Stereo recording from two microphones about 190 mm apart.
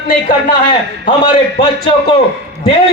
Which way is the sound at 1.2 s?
25° left (ahead or behind).